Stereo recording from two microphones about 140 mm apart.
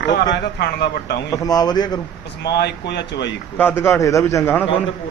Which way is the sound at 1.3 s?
25° left (ahead or behind).